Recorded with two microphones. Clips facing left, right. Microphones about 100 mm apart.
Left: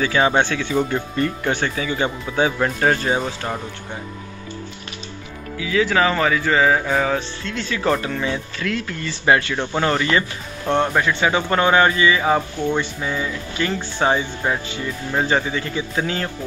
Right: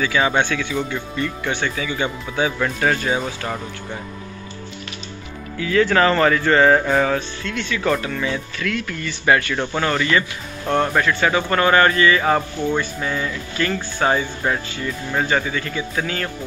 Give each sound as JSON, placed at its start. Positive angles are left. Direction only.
{"t": 0.0, "sound": "speech", "side_deg": 30}
{"t": 5.6, "sound": "speech", "side_deg": 5}
{"t": 7.2, "sound": "speech", "side_deg": 30}
{"t": 10.9, "sound": "speech", "side_deg": 15}
{"t": 15.1, "sound": "speech", "side_deg": 25}